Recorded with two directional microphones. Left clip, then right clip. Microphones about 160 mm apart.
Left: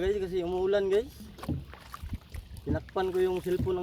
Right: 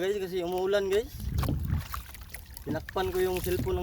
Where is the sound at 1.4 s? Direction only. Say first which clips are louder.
Right 4 dB; 35° right (ahead or behind).